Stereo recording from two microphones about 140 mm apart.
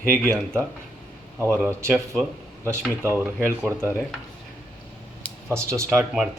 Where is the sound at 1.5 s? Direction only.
20° right (ahead or behind).